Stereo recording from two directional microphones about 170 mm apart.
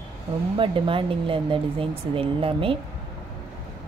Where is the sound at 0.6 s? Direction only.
30° right (ahead or behind).